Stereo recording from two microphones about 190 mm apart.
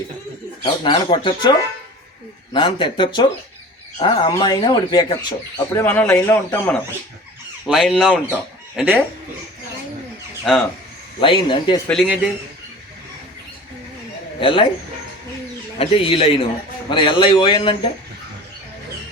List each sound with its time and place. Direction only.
0.6 s speech: 25° left (ahead or behind)
5.7 s speech: 10° left (ahead or behind)
7.7 s fowl: centre (ahead or behind)
8.8 s speech: 10° right (ahead or behind)
10.5 s speech: centre (ahead or behind)
11.2 s speech: 25° left (ahead or behind)
11.9 s speech: centre (ahead or behind)
14.4 s speech: 30° left (ahead or behind)
15.8 s speech: 30° left (ahead or behind)